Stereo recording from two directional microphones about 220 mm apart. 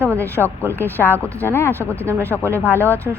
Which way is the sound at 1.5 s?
10° left (ahead or behind).